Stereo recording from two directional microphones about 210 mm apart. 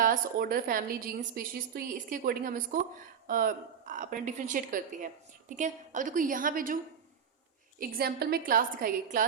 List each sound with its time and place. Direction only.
0.0 s a woman's voice: 45° right (ahead or behind)
7.8 s a woman's voice: 45° right (ahead or behind)